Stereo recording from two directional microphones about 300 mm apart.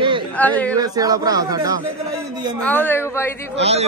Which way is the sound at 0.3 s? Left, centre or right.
Centre.